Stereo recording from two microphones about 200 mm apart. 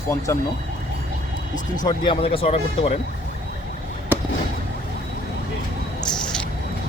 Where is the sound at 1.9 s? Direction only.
30° left (ahead or behind).